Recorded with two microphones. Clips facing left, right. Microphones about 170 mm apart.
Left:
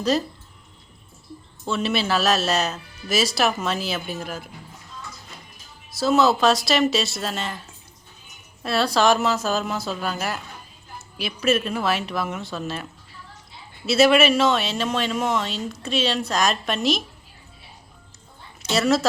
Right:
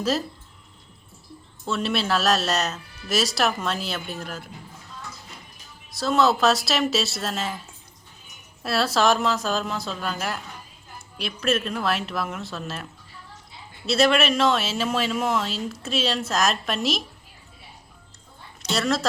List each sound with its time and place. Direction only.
0.0 s speech: centre (ahead or behind)
1.6 s speech: centre (ahead or behind)
6.0 s speech: centre (ahead or behind)
8.6 s speech: centre (ahead or behind)
18.7 s speech: centre (ahead or behind)